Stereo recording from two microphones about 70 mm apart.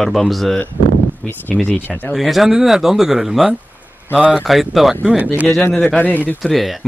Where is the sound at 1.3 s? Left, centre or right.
Left.